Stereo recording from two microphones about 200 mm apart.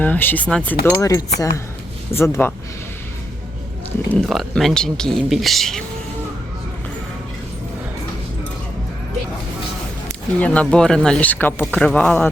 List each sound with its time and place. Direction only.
0.0 s speech: 10° left (ahead or behind)
4.1 s speech: centre (ahead or behind)
10.4 s speech: 5° left (ahead or behind)